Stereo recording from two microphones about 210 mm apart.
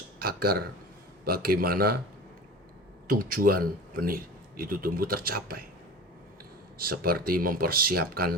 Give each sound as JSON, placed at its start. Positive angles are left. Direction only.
{"t": 0.2, "sound": "speech", "side_deg": -45}
{"t": 3.1, "sound": "speech", "side_deg": -40}
{"t": 6.7, "sound": "speech", "side_deg": -45}